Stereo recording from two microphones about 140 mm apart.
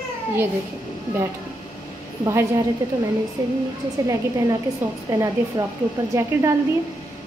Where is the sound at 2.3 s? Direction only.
20° right (ahead or behind).